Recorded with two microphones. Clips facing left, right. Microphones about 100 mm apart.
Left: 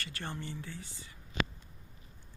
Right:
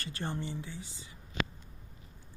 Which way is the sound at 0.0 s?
30° right (ahead or behind).